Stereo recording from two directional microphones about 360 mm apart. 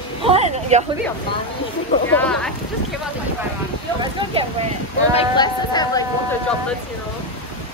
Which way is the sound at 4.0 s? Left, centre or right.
Centre.